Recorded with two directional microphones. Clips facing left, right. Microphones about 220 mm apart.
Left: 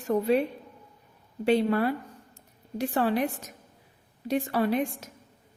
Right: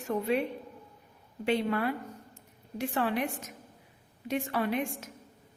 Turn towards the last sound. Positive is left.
turn(degrees=35)  # may be behind; listen again after turning